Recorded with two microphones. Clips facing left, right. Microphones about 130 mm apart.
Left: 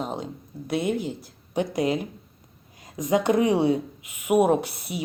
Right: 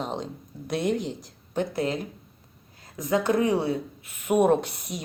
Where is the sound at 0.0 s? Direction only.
5° left (ahead or behind).